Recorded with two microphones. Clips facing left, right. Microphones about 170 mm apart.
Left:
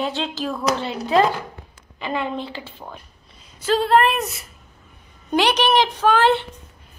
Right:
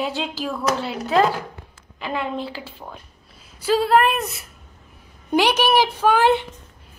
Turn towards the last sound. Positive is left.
turn(degrees=-10)  # may be behind; listen again after turning